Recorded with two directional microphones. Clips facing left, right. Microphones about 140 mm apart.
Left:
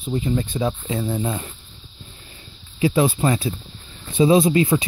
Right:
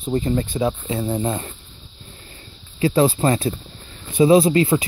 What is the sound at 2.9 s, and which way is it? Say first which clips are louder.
Speech: right 2 dB; 30° right (ahead or behind).